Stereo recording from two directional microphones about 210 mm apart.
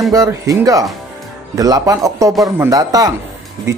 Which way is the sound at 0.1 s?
15° right (ahead or behind).